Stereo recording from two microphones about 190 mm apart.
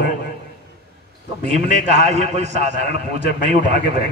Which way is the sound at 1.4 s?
35° right (ahead or behind).